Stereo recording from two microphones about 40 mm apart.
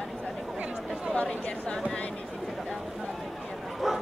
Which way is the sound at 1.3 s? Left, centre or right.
Centre.